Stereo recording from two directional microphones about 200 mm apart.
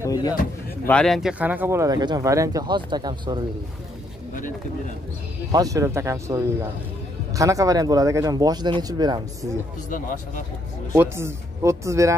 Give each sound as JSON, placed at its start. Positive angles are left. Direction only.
{"t": 0.0, "sound": "a sound", "side_deg": 20}
{"t": 0.8, "sound": "speech", "side_deg": 5}
{"t": 4.3, "sound": "speech", "side_deg": 40}
{"t": 5.5, "sound": "speech", "side_deg": -15}
{"t": 9.8, "sound": "speech", "side_deg": 40}
{"t": 10.9, "sound": "speech", "side_deg": -15}